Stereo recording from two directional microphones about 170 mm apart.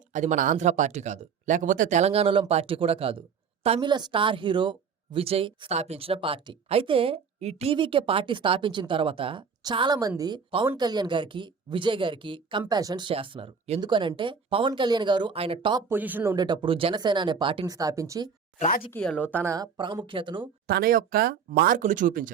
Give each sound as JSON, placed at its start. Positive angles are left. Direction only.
{"t": 0.1, "sound": "speech", "side_deg": -45}
{"t": 15.9, "sound": "speech", "side_deg": -10}
{"t": 16.3, "sound": "speech", "side_deg": -25}
{"t": 18.9, "sound": "speech", "side_deg": 10}
{"t": 19.5, "sound": "speech", "side_deg": -20}
{"t": 20.7, "sound": "speech", "side_deg": -65}